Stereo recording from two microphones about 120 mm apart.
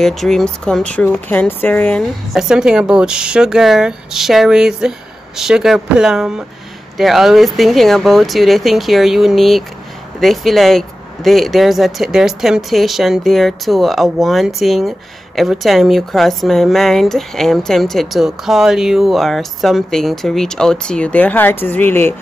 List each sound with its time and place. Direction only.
0.0 s speech: centre (ahead or behind)
2.3 s speech: 5° right (ahead or behind); by 22.1 s 15° left (ahead or behind)